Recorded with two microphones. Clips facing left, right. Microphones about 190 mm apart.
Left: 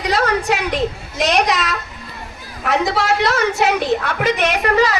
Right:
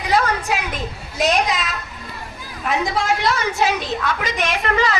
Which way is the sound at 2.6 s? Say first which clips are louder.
Left 3 dB; 70° left (ahead or behind).